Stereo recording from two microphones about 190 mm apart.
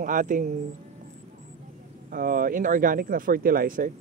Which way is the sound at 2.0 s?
45° right (ahead or behind).